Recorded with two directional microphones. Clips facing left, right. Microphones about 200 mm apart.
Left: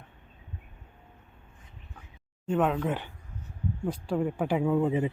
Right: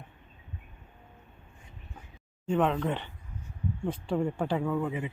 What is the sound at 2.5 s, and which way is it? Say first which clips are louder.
Speech: even; 5° left (ahead or behind).